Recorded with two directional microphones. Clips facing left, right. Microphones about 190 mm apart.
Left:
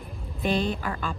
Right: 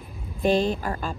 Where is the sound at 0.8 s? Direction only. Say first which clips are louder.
Right 2 dB; 40° right (ahead or behind).